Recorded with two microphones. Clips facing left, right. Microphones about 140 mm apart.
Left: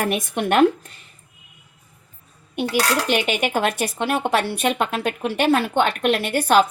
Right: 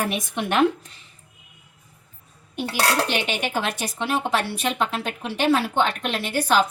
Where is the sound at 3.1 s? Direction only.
55° left (ahead or behind).